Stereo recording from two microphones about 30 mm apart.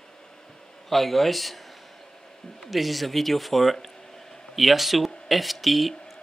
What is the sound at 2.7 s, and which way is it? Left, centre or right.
Speech, centre.